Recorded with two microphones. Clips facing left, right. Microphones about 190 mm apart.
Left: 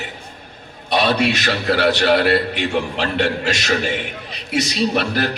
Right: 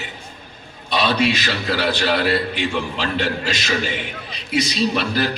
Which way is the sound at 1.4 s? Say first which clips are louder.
Left 4 dB; 50° left (ahead or behind).